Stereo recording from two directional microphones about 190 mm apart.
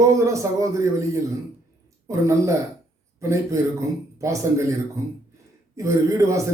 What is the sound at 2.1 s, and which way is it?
Speech, 15° right (ahead or behind).